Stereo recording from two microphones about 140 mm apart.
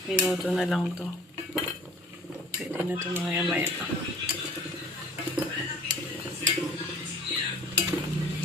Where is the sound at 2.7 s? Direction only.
15° right (ahead or behind).